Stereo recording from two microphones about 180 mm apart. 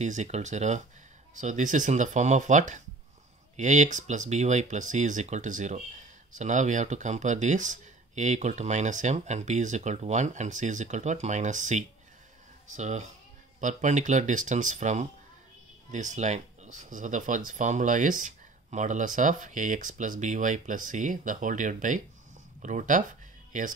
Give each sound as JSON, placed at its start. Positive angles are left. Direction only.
{"t": 0.0, "sound": "speech", "side_deg": -40}